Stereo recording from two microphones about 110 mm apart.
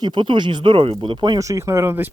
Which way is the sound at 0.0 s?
45° right (ahead or behind).